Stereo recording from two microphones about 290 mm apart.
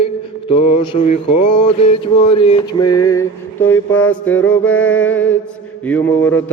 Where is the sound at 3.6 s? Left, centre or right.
Centre.